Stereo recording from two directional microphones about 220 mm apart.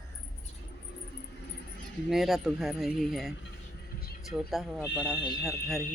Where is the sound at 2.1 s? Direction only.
Centre (ahead or behind).